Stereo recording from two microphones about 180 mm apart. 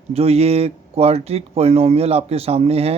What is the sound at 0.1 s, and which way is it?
Speech, 35° right (ahead or behind).